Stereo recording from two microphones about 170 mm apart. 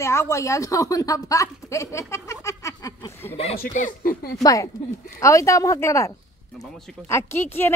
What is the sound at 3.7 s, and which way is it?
Speech, 50° left (ahead or behind).